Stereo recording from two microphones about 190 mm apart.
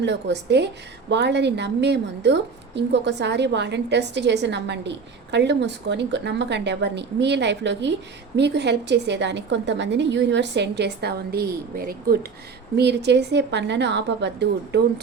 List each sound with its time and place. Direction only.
0.0 s a woman's voice: 65° right (ahead or behind)
12.7 s a woman's voice: 60° right (ahead or behind)